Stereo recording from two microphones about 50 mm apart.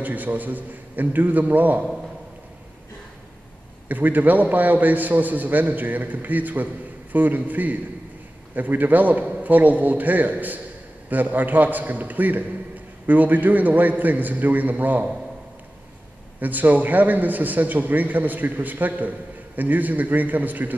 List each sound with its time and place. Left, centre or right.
0.0 s a man's voice: right
3.9 s a man's voice: right
16.3 s a man's voice: right